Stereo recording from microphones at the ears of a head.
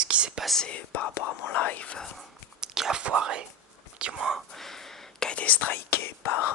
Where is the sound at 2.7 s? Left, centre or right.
Right.